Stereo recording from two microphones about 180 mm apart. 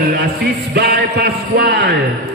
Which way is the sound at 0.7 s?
65° right (ahead or behind).